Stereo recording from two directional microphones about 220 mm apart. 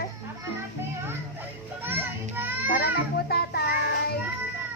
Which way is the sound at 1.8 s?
10° right (ahead or behind).